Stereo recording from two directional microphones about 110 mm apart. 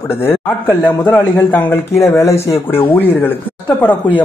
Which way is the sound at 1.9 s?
25° left (ahead or behind).